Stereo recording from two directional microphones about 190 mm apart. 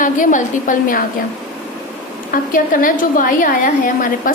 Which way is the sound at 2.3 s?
45° left (ahead or behind).